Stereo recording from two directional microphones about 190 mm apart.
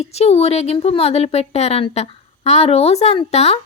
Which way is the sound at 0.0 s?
35° left (ahead or behind).